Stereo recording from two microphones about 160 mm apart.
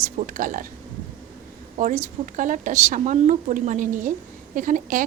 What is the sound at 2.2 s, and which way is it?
A woman's voice, 55° right (ahead or behind).